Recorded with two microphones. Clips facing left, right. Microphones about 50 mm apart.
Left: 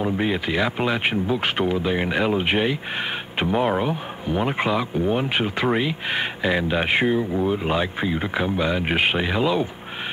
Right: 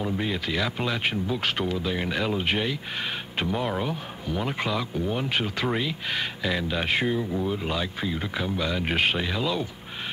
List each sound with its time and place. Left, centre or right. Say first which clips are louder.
0.0 s speech: left 5 dB; left